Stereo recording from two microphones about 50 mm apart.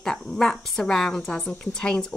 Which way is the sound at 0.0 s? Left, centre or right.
Centre.